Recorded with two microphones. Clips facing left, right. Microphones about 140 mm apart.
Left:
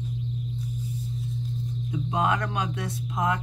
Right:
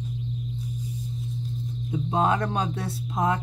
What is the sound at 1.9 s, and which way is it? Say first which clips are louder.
Speech: right 2 dB; 30° right (ahead or behind).